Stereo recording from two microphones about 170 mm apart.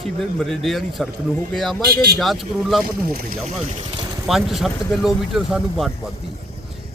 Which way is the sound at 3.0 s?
60° right (ahead or behind).